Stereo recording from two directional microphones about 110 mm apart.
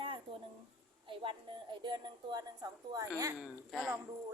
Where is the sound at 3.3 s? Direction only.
Centre (ahead or behind).